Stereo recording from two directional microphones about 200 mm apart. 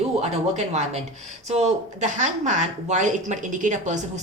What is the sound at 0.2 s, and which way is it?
Speech, 35° right (ahead or behind).